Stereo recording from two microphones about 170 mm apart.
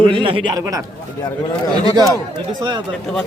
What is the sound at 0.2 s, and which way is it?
Speech, 30° right (ahead or behind).